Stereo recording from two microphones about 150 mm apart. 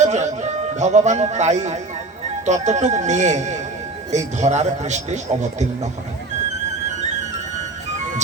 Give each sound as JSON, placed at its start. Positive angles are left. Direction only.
{"t": 0.0, "sound": "speech", "side_deg": -50}